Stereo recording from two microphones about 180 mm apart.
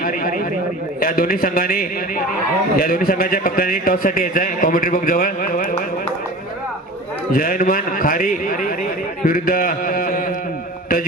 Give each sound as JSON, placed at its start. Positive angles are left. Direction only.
{"t": 0.9, "sound": "a man's voice", "side_deg": 55}
{"t": 7.3, "sound": "a man's voice", "side_deg": 50}